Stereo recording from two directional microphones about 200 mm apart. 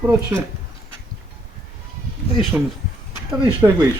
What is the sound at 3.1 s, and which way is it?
Speech, 15° right (ahead or behind).